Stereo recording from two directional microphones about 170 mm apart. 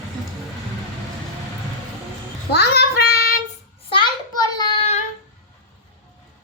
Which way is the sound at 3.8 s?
30° left (ahead or behind).